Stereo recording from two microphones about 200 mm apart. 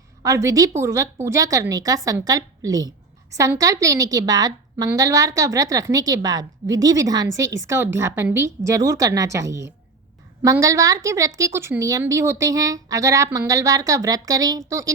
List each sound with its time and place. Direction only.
0.2 s a woman's voice: 15° right (ahead or behind)